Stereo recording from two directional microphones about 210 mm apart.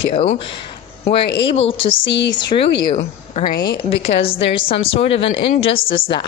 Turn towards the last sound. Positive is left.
turn(degrees=25)  # may be behind; listen again after turning